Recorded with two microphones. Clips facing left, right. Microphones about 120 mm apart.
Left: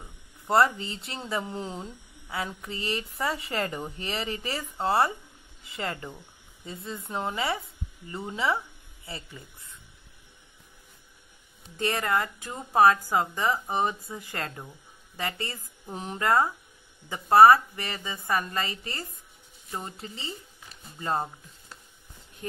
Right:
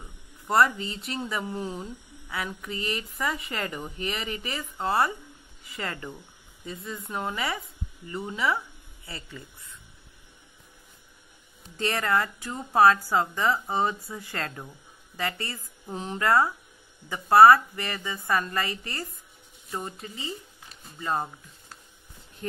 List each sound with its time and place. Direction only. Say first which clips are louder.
0.5 s speech: even; 25° left (ahead or behind)
11.7 s speech: right 1 dB; 20° left (ahead or behind)